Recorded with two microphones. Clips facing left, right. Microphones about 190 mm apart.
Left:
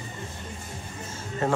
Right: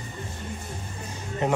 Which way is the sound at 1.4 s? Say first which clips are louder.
Right 1 dB; 20° right (ahead or behind).